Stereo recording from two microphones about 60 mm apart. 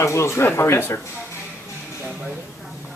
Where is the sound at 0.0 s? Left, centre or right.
Left.